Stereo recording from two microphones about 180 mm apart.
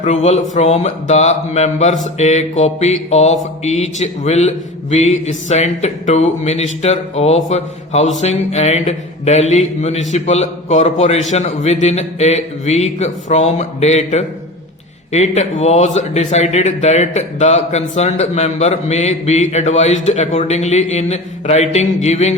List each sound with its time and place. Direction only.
0.0 s speech: 40° left (ahead or behind)